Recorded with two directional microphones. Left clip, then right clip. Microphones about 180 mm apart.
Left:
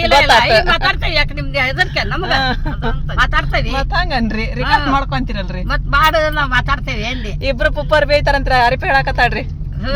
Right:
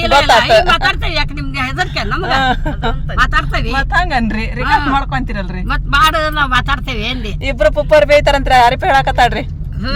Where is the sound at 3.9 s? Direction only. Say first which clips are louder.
Right 3 dB; 25° right (ahead or behind).